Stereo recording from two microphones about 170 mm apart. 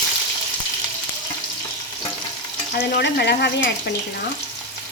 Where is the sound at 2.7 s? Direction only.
80° left.